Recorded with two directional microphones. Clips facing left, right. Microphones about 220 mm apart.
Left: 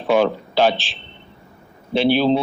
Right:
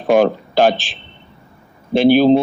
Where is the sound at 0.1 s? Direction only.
50° right (ahead or behind).